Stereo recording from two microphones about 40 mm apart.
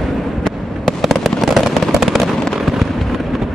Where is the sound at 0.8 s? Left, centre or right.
Centre.